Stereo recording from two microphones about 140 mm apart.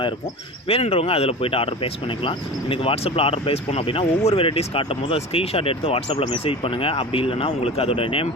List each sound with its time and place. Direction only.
0.7 s speech: 45° left (ahead or behind)